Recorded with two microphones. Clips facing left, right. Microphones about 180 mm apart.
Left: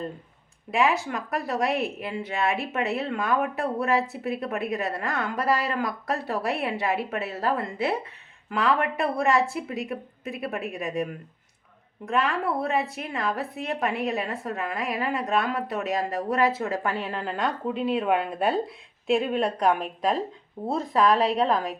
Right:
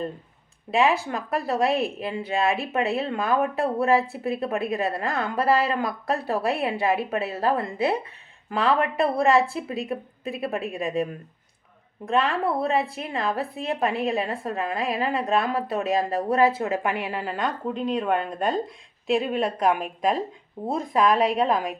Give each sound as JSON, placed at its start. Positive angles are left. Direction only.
{"t": 0.7, "sound": "a woman's voice", "side_deg": -30}